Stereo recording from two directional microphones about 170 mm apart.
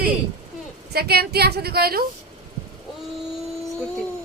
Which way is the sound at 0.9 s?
65° right (ahead or behind).